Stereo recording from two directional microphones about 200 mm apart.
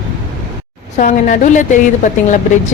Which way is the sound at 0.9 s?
40° left (ahead or behind).